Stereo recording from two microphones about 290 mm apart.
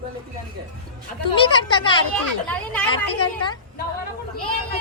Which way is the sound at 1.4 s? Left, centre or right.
Centre.